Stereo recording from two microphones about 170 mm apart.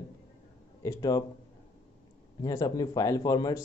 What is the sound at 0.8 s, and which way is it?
Speech, 20° left (ahead or behind).